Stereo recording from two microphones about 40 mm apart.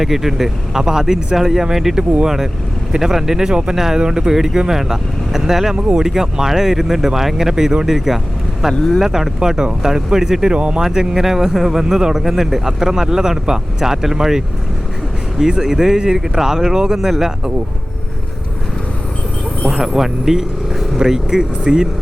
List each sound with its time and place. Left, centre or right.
0.0 s speech: centre
4.4 s speech: centre
10.5 s speech: right
10.8 s speech: centre
19.7 s speech: centre